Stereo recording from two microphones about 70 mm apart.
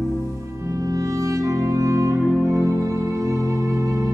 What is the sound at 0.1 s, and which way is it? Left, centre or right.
Music, right.